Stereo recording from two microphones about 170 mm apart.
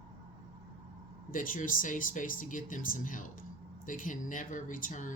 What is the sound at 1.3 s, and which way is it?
Speech, 50° left (ahead or behind).